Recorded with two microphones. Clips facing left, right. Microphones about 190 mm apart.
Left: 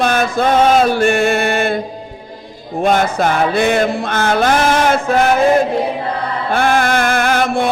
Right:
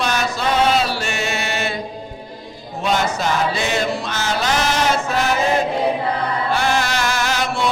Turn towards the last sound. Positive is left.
turn(degrees=55)  # may be behind; listen again after turning